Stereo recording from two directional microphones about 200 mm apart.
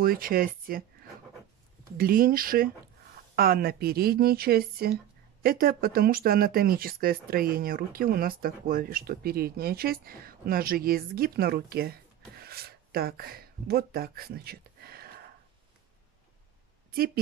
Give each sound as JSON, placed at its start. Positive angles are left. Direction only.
{"t": 0.0, "sound": "speech", "side_deg": -45}
{"t": 2.0, "sound": "speech", "side_deg": -45}
{"t": 16.9, "sound": "speech", "side_deg": -50}